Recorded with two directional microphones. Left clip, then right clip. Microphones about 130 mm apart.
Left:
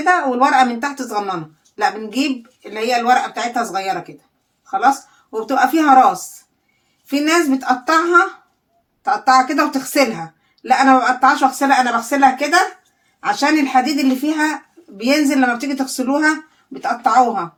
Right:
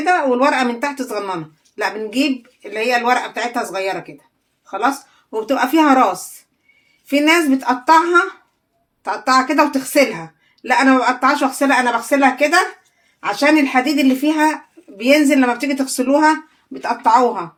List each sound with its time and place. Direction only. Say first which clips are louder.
0.0 s a woman's voice: even; 50° right (ahead or behind)
5.3 s a woman's voice: left 1 dB; 50° right (ahead or behind)
7.1 s a woman's voice: right 2 dB; 50° right (ahead or behind)